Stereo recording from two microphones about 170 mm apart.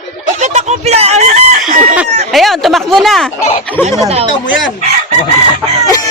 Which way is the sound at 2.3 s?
Centre (ahead or behind).